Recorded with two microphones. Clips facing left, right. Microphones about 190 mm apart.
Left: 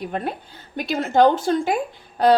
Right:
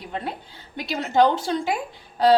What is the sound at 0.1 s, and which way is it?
A woman's voice, 50° left (ahead or behind).